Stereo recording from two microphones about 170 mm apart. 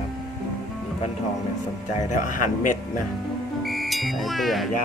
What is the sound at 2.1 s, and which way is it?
Speech, 50° left (ahead or behind).